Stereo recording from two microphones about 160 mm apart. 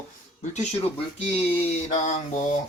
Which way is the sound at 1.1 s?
40° left (ahead or behind).